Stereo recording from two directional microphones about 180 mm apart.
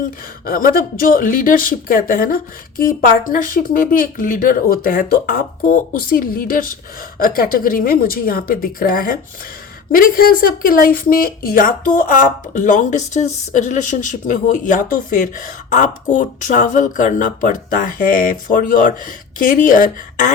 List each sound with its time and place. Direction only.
0.4 s a woman's voice: 55° left (ahead or behind)